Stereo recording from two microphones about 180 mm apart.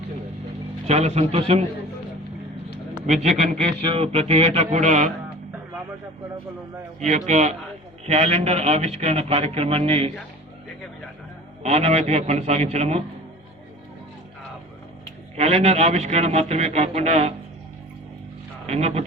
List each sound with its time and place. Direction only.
0.9 s a man's voice: 35° right (ahead or behind)
3.1 s a man's voice: 40° right (ahead or behind)
7.3 s a man's voice: 40° right (ahead or behind)
11.6 s a man's voice: 40° right (ahead or behind)
15.4 s a man's voice: 35° right (ahead or behind)
18.6 s speech: 35° right (ahead or behind)